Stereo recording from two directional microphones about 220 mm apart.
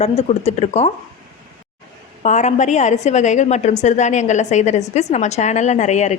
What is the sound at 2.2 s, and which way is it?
A woman's voice, 35° left (ahead or behind).